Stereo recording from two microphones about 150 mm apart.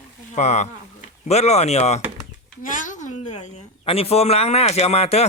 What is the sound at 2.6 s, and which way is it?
A woman's voice, 60° left (ahead or behind).